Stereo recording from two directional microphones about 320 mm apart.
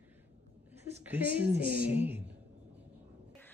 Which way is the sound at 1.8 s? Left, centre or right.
Centre.